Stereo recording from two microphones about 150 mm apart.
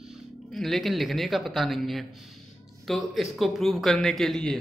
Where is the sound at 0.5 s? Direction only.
Centre (ahead or behind).